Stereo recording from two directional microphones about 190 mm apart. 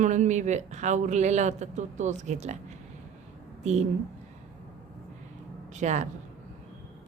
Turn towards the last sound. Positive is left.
turn(degrees=-40)  # may be behind; listen again after turning